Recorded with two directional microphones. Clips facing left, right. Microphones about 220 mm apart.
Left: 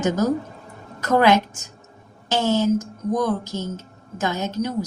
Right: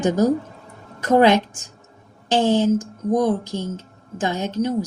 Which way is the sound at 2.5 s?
30° right (ahead or behind).